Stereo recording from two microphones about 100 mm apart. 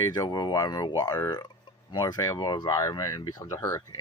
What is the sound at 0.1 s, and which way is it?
Speech, 45° left (ahead or behind).